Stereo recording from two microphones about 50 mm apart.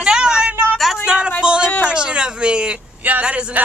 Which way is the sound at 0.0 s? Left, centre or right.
Centre.